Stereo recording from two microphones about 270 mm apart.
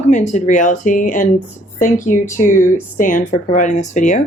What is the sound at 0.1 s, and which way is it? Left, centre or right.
Speech, left.